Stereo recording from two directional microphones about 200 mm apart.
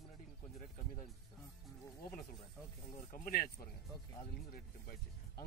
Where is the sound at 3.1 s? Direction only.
45° left (ahead or behind).